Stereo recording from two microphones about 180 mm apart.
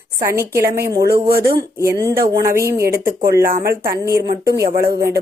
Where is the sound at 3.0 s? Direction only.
55° right (ahead or behind).